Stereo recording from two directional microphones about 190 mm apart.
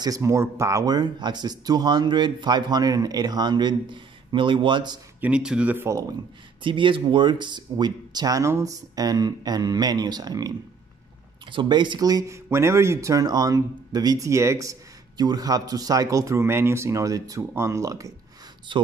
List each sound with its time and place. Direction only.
0.0 s speech: 15° right (ahead or behind)
5.2 s speech: 5° right (ahead or behind)
6.6 s speech: 25° right (ahead or behind)
11.5 s speech: 25° right (ahead or behind)